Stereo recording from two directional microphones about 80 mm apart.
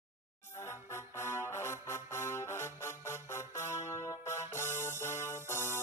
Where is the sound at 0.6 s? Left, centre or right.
Left.